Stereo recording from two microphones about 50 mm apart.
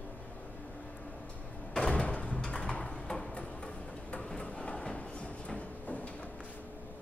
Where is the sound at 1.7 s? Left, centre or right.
Centre.